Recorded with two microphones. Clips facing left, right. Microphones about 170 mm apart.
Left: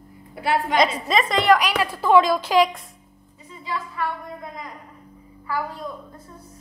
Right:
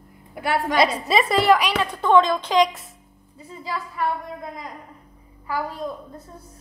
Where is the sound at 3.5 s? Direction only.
40° right (ahead or behind).